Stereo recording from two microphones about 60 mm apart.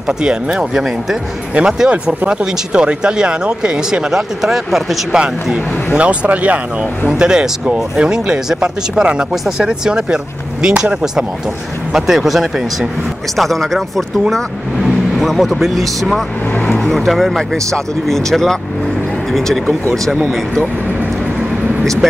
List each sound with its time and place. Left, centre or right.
0.2 s speech: centre
5.9 s speech: right
7.1 s speech: centre
15.1 s speech: centre